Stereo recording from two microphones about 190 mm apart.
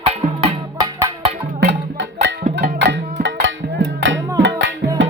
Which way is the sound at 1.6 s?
70° right (ahead or behind).